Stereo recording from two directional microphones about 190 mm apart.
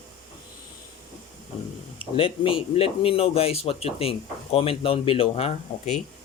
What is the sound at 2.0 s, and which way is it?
Speech, 30° left (ahead or behind).